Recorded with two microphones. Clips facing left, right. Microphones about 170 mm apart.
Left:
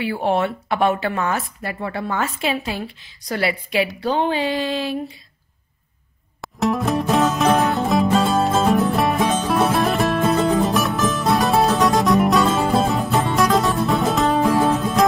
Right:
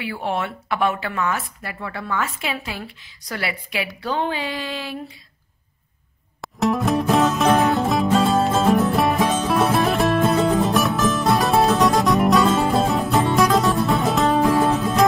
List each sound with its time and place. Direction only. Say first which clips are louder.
0.0 s speech: left 5 dB; 30° left (ahead or behind)
6.4 s music: even; centre (ahead or behind)